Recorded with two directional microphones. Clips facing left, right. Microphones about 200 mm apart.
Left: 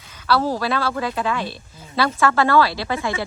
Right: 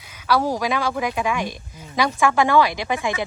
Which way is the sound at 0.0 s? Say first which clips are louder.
Even; 10° right (ahead or behind).